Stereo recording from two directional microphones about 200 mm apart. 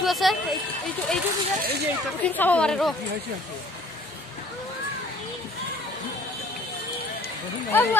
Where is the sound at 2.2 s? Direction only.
10° left (ahead or behind).